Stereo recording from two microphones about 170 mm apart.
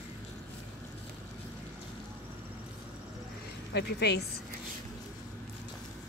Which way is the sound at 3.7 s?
80° left.